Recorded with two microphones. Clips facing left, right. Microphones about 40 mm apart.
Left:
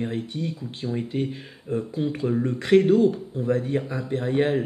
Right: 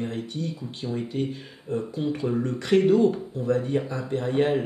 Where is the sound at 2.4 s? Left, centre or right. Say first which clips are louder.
Left 5 dB; centre.